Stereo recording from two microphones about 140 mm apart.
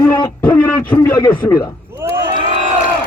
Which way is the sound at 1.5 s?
30° left (ahead or behind).